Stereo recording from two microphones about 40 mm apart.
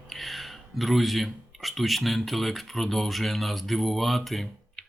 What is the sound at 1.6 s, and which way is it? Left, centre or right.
Speech, centre.